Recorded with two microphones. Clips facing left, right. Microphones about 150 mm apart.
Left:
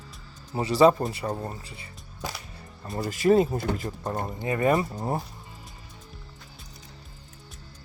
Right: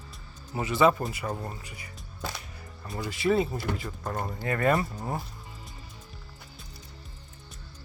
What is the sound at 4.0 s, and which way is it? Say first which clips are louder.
Speech: left 2 dB; 25° left (ahead or behind).